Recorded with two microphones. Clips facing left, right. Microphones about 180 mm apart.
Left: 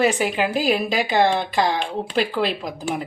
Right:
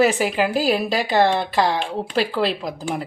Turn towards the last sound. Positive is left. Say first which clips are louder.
# even
turn(degrees=0)  # may be behind; listen again after turning